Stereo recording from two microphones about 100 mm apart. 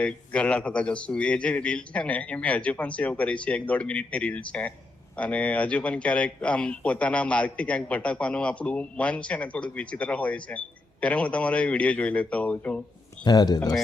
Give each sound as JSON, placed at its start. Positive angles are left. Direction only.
{"t": 0.0, "sound": "speech", "side_deg": 10}
{"t": 13.2, "sound": "speech", "side_deg": 40}